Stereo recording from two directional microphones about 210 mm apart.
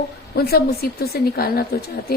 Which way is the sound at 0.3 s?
50° left (ahead or behind).